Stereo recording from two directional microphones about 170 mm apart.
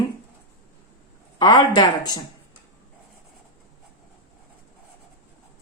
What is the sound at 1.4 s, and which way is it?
Speech, 25° left (ahead or behind).